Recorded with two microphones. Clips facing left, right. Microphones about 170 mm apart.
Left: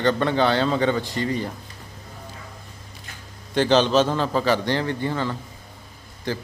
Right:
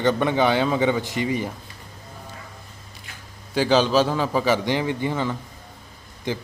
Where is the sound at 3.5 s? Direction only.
5° right (ahead or behind).